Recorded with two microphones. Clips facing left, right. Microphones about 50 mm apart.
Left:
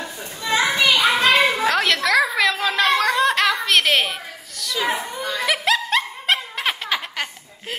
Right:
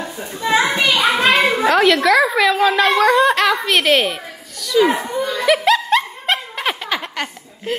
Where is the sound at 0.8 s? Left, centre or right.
Right.